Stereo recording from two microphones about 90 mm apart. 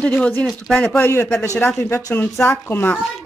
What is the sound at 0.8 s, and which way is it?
Speech, 20° left (ahead or behind).